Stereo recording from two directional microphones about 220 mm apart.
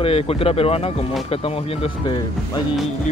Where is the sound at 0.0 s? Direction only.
25° left (ahead or behind).